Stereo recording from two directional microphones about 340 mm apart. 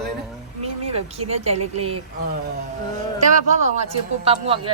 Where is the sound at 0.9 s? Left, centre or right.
Centre.